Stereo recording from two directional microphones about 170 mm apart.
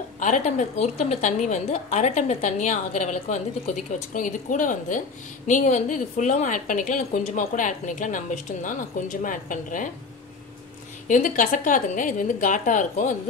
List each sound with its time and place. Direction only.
0.2 s a woman's voice: 45° left (ahead or behind)
11.1 s a woman's voice: 50° left (ahead or behind)